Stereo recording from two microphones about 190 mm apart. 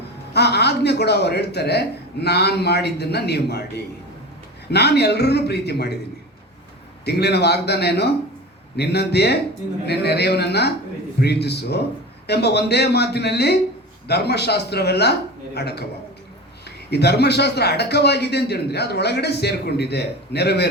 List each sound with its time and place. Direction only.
0.3 s a man's voice: 60° left (ahead or behind)
7.0 s a man's voice: 60° left (ahead or behind)